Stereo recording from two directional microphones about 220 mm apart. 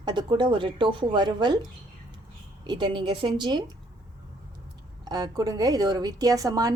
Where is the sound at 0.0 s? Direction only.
20° right (ahead or behind).